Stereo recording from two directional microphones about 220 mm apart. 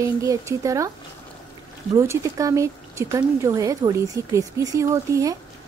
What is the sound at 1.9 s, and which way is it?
Speech, 15° right (ahead or behind).